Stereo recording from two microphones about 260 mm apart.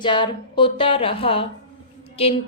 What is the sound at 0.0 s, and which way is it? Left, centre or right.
Speech, centre.